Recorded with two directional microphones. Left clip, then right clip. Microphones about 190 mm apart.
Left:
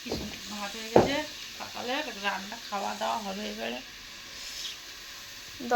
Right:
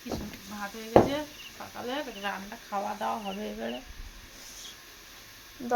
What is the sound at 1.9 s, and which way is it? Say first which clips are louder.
Speech: left 2 dB; 50° right (ahead or behind).